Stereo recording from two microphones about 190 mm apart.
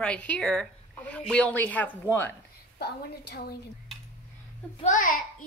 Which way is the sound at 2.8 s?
55° left (ahead or behind).